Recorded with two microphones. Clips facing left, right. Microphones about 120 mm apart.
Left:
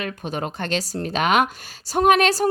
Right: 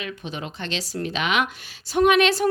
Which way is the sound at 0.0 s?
45° left (ahead or behind).